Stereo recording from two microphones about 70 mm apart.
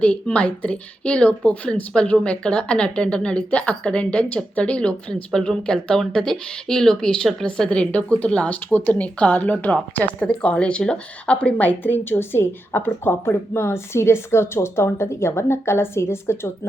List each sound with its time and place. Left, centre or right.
0.0 s a woman's voice: centre; by 16.5 s left